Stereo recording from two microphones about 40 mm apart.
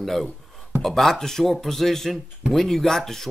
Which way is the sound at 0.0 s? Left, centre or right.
Centre.